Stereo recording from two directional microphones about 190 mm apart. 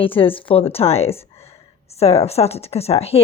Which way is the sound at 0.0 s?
30° left (ahead or behind).